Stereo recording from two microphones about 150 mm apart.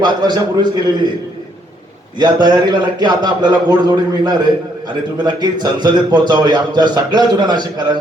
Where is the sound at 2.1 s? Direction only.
30° right (ahead or behind).